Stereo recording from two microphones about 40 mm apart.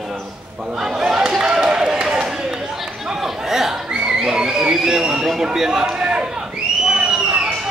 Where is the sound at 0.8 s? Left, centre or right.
Centre.